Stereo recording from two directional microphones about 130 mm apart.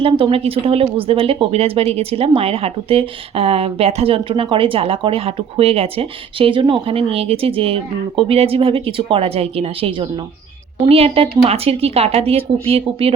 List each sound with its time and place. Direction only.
0.0 s speech: 45° right (ahead or behind)